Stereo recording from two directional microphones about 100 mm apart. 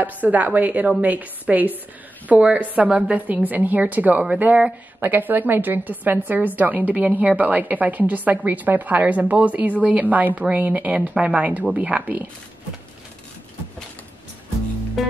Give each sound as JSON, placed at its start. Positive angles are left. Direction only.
{"t": 0.0, "sound": "a woman's voice", "side_deg": -15}
{"t": 15.0, "sound": "music", "side_deg": 0}